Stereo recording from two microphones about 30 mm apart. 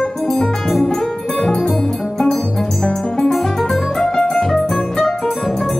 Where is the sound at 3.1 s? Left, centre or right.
Centre.